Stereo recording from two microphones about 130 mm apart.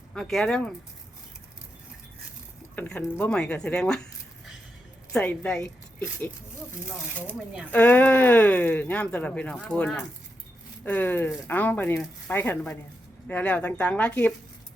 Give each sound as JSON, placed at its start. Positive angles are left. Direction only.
{"t": 0.1, "sound": "speech", "side_deg": 5}
{"t": 2.7, "sound": "speech", "side_deg": 10}
{"t": 5.1, "sound": "speech", "side_deg": 10}
{"t": 7.2, "sound": "speech", "side_deg": -10}
{"t": 7.7, "sound": "speech", "side_deg": 10}